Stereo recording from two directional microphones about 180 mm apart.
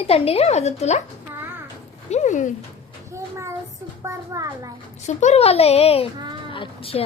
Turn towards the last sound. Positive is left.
turn(degrees=30)  # may be behind; listen again after turning